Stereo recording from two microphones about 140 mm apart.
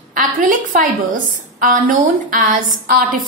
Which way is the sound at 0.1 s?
75° right (ahead or behind).